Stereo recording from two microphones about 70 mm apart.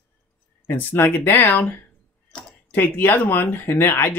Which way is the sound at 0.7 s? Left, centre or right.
Left.